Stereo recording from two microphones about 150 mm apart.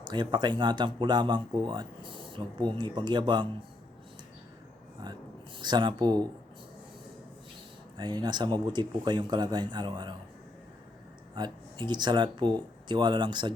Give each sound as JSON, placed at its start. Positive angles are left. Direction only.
{"t": 0.0, "sound": "speech", "side_deg": -30}
{"t": 5.0, "sound": "speech", "side_deg": -25}
{"t": 7.9, "sound": "speech", "side_deg": -30}
{"t": 11.3, "sound": "speech", "side_deg": -30}